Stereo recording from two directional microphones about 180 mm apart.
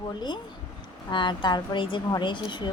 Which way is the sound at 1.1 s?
25° left (ahead or behind).